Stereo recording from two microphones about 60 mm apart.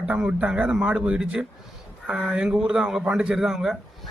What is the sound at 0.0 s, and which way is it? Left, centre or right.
A man's voice, centre.